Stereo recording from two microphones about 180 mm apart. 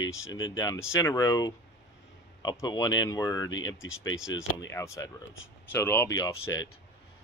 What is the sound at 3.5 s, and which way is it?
Speech, 90° left.